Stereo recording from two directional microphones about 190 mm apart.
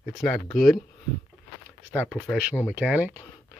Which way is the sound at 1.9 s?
10° left (ahead or behind).